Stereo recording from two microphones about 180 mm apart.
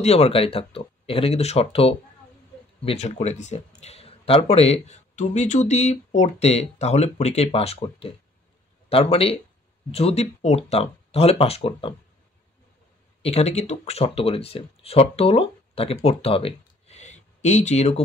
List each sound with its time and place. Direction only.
0.0 s speech: 35° left (ahead or behind)
13.2 s speech: 35° left (ahead or behind)